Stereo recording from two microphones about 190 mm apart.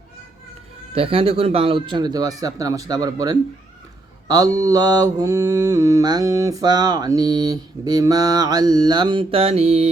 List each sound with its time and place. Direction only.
0.9 s mantra: 30° right (ahead or behind)